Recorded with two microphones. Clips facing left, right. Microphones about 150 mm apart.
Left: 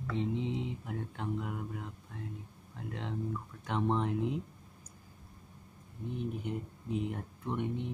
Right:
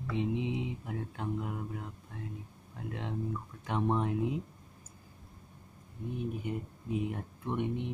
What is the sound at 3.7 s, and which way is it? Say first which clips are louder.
Speech: right 1 dB; 5° right (ahead or behind).